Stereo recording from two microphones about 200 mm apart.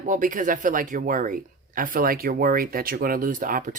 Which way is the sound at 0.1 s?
40° right (ahead or behind).